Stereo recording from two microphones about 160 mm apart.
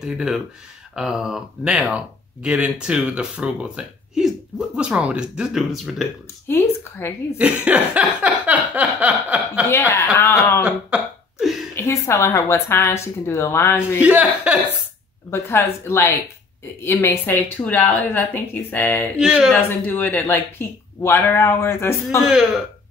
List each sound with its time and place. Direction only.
0.0 s speech: 5° right (ahead or behind)
6.4 s speech: 15° left (ahead or behind)
7.3 s a sound: 10° right (ahead or behind)
9.7 s speech: 15° left (ahead or behind)
10.6 s cough: 5° right (ahead or behind)
11.7 s speech: 15° left (ahead or behind)
14.0 s speech: 10° right (ahead or behind)
15.3 s speech: 15° left (ahead or behind)
19.1 s speech: 5° right (ahead or behind)
19.5 s speech: 15° left (ahead or behind)